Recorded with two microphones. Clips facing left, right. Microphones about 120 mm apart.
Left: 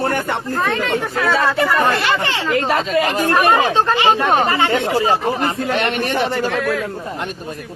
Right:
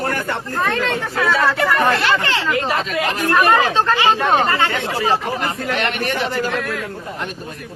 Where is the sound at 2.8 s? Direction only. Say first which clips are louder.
Left 3 dB; 30° left (ahead or behind).